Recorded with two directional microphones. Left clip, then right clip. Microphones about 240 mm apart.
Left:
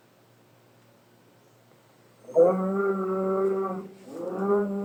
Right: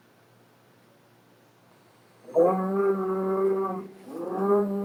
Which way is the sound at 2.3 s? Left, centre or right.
Right.